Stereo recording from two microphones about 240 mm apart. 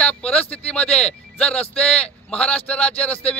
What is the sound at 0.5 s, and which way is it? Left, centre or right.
A man's voice, centre.